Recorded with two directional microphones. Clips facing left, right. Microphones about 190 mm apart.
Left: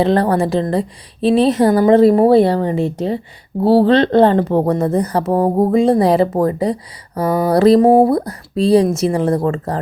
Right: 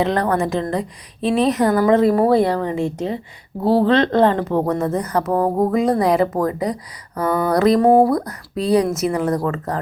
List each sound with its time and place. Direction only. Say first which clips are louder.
0.0 s a woman's voice: left 4 dB; 30° left (ahead or behind)